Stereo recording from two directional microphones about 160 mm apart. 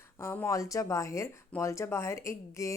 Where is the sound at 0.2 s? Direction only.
15° left (ahead or behind).